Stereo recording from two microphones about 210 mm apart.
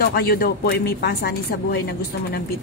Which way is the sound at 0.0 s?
45° left (ahead or behind).